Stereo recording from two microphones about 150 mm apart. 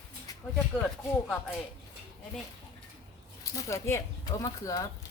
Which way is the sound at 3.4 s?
20° left (ahead or behind).